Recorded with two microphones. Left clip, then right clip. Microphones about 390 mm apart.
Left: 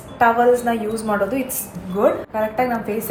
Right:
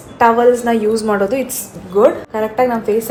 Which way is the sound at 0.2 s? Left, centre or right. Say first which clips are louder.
Right 4 dB; right.